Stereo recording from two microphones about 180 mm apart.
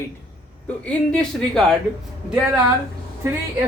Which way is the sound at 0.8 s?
5° left (ahead or behind).